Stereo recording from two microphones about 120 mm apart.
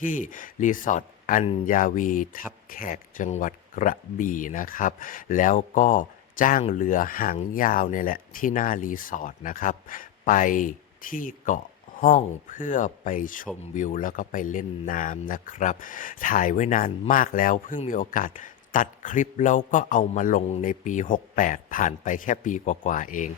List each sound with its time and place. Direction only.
0.0 s speech: 90° left
1.5 s speech: 75° left (ahead or behind)
3.2 s speech: 80° left
6.6 s speech: 75° left (ahead or behind)
8.4 s speech: 90° left